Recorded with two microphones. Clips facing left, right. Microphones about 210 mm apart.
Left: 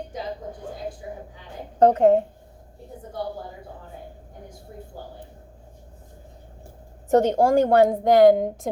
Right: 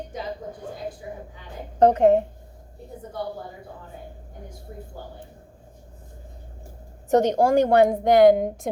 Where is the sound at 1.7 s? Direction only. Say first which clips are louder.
Even; 20° right (ahead or behind).